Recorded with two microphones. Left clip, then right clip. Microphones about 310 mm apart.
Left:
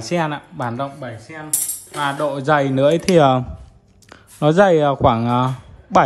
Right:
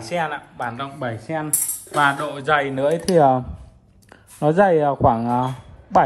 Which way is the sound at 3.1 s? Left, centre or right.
Right.